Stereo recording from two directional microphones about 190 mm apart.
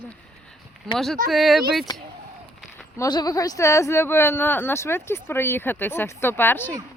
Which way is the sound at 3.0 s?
20° left (ahead or behind).